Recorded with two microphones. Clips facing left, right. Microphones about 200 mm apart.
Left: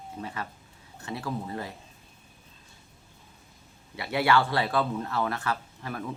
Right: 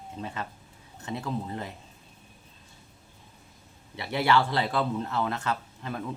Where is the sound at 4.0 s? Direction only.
25° right (ahead or behind).